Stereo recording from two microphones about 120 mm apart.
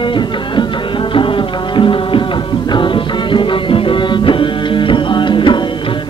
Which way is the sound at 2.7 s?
45° left (ahead or behind).